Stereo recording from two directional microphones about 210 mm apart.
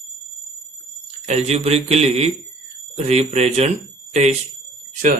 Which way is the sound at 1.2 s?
30° right (ahead or behind).